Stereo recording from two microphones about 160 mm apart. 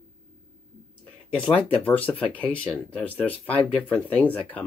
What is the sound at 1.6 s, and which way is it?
Speech, 10° left (ahead or behind).